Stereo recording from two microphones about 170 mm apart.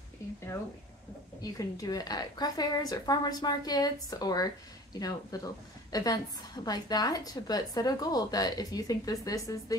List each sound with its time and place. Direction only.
1.4 s a woman's voice: 20° left (ahead or behind)